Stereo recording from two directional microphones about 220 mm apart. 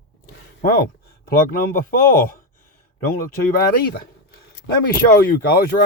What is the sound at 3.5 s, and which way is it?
Speech, 45° left (ahead or behind).